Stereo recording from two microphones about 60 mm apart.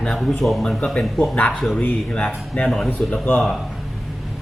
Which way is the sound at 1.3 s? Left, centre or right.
Left.